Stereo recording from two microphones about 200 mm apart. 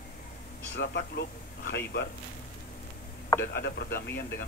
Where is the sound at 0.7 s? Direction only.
55° left (ahead or behind).